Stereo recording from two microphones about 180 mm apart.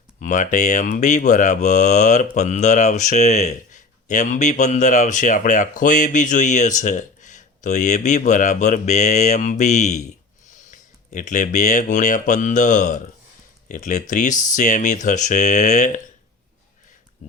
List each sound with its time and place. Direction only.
0.2 s speech: 45° left (ahead or behind)